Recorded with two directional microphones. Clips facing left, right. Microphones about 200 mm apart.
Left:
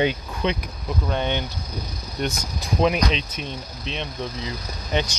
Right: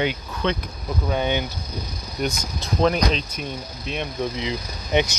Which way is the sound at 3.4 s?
10° right (ahead or behind).